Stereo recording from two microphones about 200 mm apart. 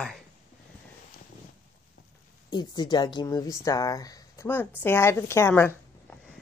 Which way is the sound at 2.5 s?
20° left (ahead or behind).